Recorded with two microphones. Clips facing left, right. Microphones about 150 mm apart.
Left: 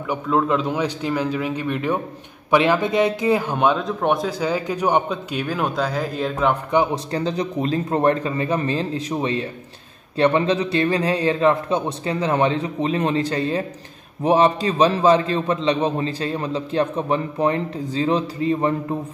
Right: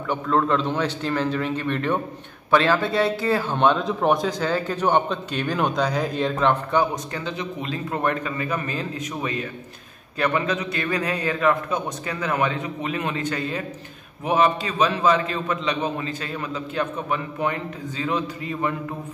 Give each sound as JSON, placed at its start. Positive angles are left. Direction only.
{"t": 0.1, "sound": "a man's voice", "side_deg": 10}
{"t": 7.1, "sound": "a man's voice", "side_deg": 35}